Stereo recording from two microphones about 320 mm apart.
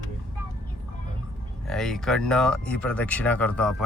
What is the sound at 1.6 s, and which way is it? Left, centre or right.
Speech, centre.